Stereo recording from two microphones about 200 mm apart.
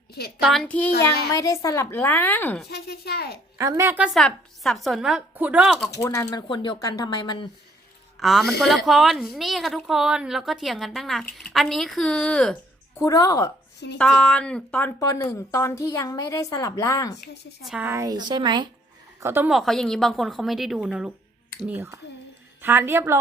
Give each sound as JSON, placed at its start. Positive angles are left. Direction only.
{"t": 0.4, "sound": "a woman's voice", "side_deg": 0}
{"t": 0.9, "sound": "a woman's voice", "side_deg": 55}
{"t": 1.3, "sound": "speech", "side_deg": 15}
{"t": 2.6, "sound": "a woman's voice", "side_deg": 55}
{"t": 3.6, "sound": "a woman's voice", "side_deg": -15}
{"t": 6.0, "sound": "speech", "side_deg": 15}
{"t": 8.2, "sound": "a woman's voice", "side_deg": 0}
{"t": 13.1, "sound": "speech", "side_deg": 15}
{"t": 14.0, "sound": "speech", "side_deg": 5}
{"t": 17.6, "sound": "a woman's voice", "side_deg": -5}
{"t": 19.2, "sound": "a woman's voice", "side_deg": -10}